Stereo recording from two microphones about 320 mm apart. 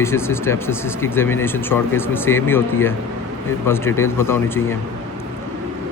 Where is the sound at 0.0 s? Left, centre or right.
Centre.